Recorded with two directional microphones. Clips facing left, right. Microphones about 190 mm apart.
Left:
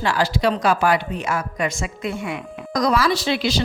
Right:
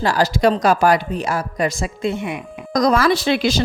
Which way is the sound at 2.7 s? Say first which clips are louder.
Right 4 dB; 45° right (ahead or behind).